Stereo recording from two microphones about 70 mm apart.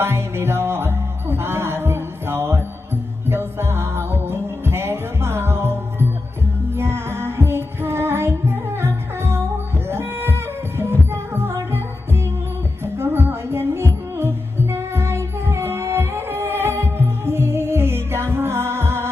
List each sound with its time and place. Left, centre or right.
0.0 s music: right